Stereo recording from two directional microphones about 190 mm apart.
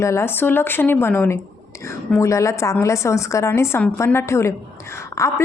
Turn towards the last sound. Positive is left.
turn(degrees=15)  # may be behind; listen again after turning